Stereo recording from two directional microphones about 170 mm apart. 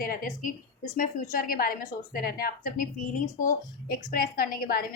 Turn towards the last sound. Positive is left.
turn(degrees=60)  # may be behind; listen again after turning